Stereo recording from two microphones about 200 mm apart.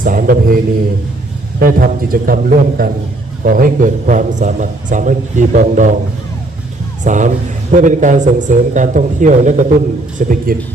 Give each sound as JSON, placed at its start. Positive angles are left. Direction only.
{"t": 0.0, "sound": "a man's voice", "side_deg": -45}
{"t": 7.0, "sound": "a man's voice", "side_deg": -40}